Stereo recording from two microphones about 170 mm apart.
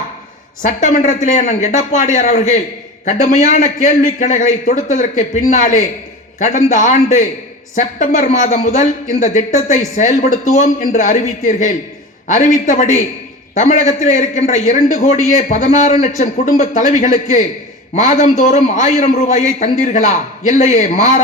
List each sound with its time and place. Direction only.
0.6 s a man's voice: 45° left (ahead or behind)
10.5 s a man's voice: 45° left (ahead or behind)